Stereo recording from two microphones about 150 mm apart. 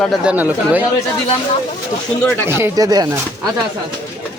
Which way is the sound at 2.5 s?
20° right (ahead or behind).